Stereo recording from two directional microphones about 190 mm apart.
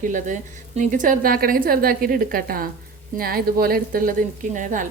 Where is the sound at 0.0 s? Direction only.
45° right (ahead or behind).